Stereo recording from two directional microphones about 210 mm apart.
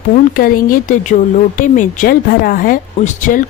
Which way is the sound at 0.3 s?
40° left (ahead or behind).